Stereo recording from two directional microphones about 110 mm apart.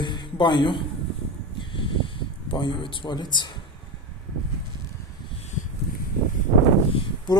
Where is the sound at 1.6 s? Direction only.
50° left (ahead or behind).